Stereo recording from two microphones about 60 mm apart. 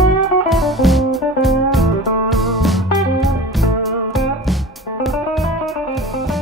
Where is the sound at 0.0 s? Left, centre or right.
Centre.